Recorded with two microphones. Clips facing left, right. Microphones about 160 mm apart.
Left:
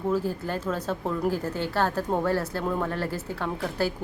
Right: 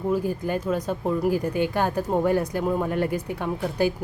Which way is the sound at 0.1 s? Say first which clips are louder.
Right 3 dB; 10° right (ahead or behind).